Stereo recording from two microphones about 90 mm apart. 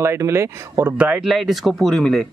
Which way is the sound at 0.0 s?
30° right (ahead or behind).